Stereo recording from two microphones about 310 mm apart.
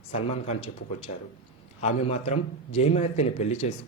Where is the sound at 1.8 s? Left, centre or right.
Centre.